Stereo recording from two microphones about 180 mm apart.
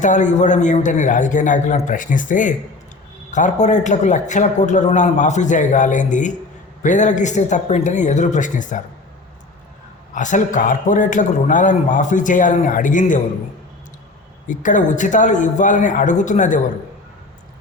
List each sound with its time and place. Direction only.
0.0 s a man's voice: 45° left (ahead or behind)
10.2 s a man's voice: 45° left (ahead or behind)
14.4 s a man's voice: 45° left (ahead or behind)